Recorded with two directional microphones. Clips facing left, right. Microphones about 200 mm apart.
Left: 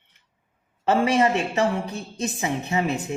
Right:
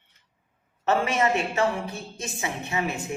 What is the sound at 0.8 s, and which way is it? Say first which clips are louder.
Speech: left 4 dB; 30° left (ahead or behind).